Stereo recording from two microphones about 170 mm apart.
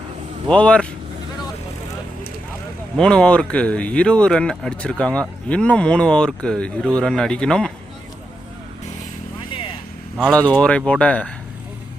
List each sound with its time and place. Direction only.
0.5 s speech: 5° left (ahead or behind)
3.0 s speech: 5° left (ahead or behind)
9.5 s vehicle: 30° left (ahead or behind)
10.2 s speech: 5° left (ahead or behind)